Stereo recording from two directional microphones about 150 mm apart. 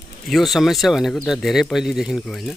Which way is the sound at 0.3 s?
Centre (ahead or behind).